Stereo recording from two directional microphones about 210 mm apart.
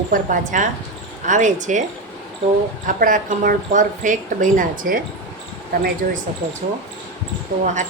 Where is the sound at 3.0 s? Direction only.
40° right (ahead or behind).